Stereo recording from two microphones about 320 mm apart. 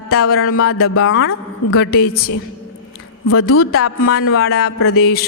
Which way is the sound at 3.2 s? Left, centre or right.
Left.